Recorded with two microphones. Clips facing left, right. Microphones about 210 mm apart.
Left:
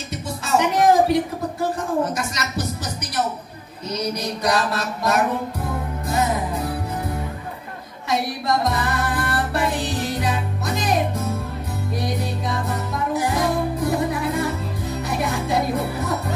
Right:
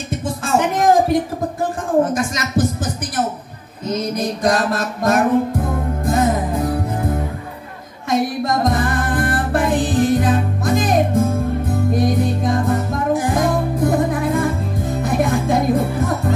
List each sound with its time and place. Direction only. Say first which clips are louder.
0.1 s music: right 3 dB; 50° right (ahead or behind)